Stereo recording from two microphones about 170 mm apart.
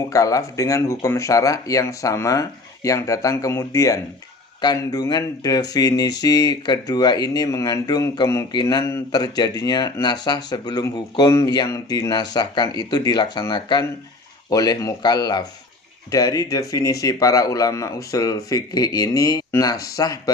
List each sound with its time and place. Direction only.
0.1 s speech: 20° left (ahead or behind)